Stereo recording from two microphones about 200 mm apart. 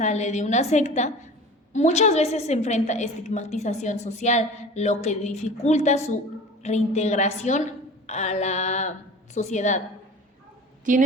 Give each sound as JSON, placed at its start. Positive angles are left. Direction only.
{"t": 0.0, "sound": "a woman's voice", "side_deg": 35}
{"t": 10.9, "sound": "a woman's voice", "side_deg": -40}